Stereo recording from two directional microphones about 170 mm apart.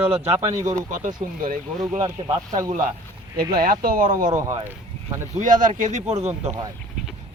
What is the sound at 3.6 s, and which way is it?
Speech, 60° right (ahead or behind).